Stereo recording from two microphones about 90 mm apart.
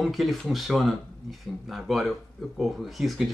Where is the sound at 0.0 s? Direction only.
Centre (ahead or behind).